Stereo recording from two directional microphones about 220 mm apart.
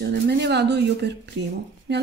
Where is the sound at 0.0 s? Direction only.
50° right (ahead or behind).